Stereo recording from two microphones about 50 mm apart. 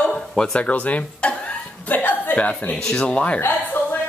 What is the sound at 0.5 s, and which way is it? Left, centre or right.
Speech, left.